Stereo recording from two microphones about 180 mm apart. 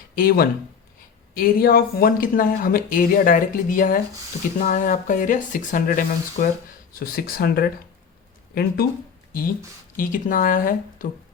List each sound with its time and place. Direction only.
0.2 s speech: 55° left (ahead or behind)
10.0 s speech: 50° left (ahead or behind)